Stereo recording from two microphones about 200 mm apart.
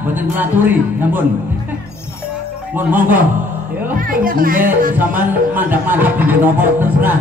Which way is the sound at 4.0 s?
45° right (ahead or behind).